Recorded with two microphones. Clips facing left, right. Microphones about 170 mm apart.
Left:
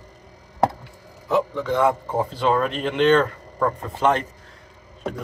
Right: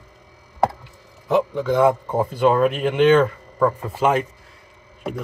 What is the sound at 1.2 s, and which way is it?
A man's voice, 15° right (ahead or behind).